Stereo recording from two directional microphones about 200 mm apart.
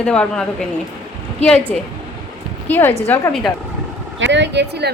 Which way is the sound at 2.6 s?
10° left (ahead or behind).